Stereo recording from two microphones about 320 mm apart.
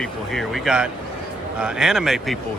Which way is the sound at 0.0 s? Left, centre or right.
Centre.